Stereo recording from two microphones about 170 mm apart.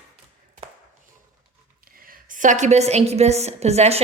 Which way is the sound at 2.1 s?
50° right (ahead or behind).